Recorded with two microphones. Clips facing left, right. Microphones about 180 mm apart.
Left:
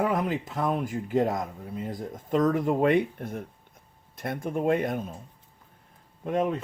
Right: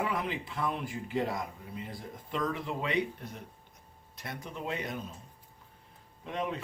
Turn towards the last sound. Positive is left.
turn(degrees=45)  # may be behind; listen again after turning